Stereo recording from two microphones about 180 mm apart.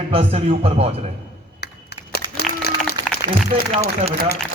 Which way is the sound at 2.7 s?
60° left (ahead or behind).